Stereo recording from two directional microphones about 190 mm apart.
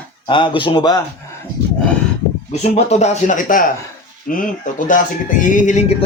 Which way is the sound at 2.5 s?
35° left (ahead or behind).